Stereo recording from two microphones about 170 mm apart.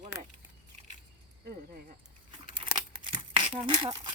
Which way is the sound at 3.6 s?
35° right (ahead or behind).